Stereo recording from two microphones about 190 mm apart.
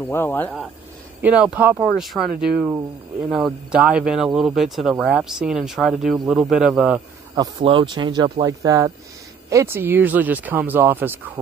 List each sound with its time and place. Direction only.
0.1 s speech: 10° left (ahead or behind)
1.2 s speech: 5° right (ahead or behind)
7.3 s speech: 25° right (ahead or behind); by 11.3 s 10° right (ahead or behind)